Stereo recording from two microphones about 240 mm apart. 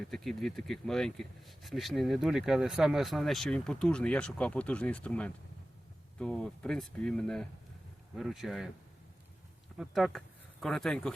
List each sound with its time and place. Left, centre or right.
0.1 s speech: centre
9.7 s speech: centre